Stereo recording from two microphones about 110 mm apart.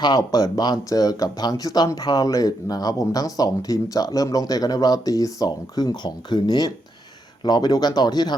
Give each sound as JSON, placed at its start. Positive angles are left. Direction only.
{"t": 0.0, "sound": "speech", "side_deg": 35}